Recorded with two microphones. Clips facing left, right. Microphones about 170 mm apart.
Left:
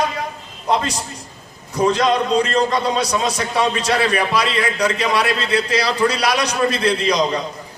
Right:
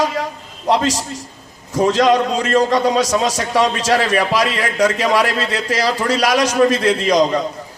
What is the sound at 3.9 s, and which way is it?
A man's voice, 45° right (ahead or behind).